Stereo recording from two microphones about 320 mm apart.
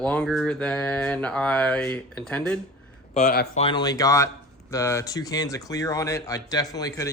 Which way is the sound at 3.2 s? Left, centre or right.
Left.